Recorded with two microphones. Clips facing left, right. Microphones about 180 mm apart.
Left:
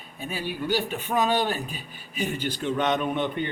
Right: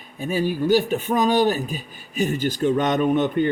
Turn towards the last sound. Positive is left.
turn(degrees=-45)  # may be behind; listen again after turning